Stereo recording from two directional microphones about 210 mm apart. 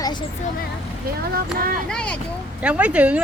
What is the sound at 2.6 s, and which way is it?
Speech, 5° right (ahead or behind).